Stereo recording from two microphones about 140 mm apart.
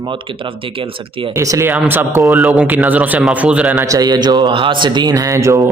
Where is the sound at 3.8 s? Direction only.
25° right (ahead or behind).